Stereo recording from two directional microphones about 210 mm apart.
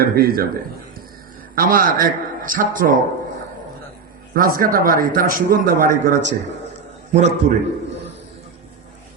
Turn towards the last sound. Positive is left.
turn(degrees=-35)  # may be behind; listen again after turning